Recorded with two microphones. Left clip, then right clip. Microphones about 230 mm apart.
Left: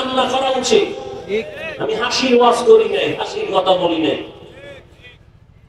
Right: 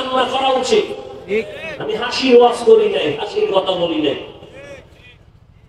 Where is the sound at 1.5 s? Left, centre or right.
Right.